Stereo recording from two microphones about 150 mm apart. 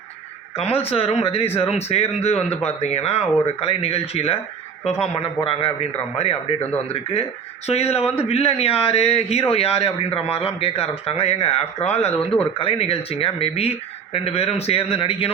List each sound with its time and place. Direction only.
0.5 s a man's voice: 40° left (ahead or behind)